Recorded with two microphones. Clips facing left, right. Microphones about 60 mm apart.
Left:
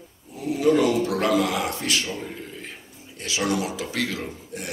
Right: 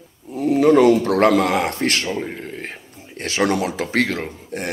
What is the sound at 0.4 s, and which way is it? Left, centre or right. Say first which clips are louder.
Speech: right 7 dB; right.